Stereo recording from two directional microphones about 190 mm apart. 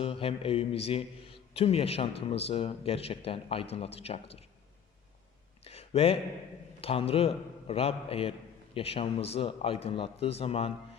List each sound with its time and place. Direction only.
0.0 s a man's voice: 30° left (ahead or behind)
5.6 s a sound: 30° left (ahead or behind)
6.8 s a man's voice: 30° left (ahead or behind)